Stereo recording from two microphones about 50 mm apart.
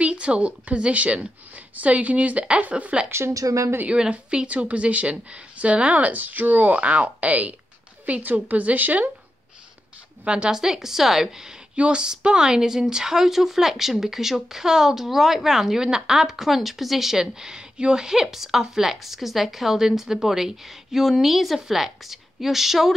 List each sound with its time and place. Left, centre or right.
0.0 s a woman's voice: right
3.1 s a woman's voice: right
3.8 s a woman's voice: centre
10.2 s a woman's voice: right
10.5 s speech: centre
11.7 s a woman's voice: right